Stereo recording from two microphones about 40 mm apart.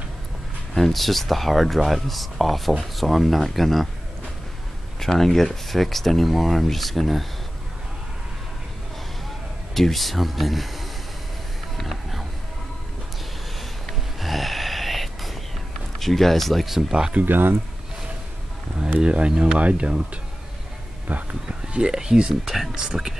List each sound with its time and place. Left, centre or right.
0.7 s speech: centre
5.0 s speech: centre
9.8 s speech: centre
11.7 s a sound: centre
14.2 s a sound: centre
16.0 s speech: centre
16.7 s speech: centre
17.3 s speech: right
18.9 s speech: right
21.1 s speech: right
21.7 s speech: centre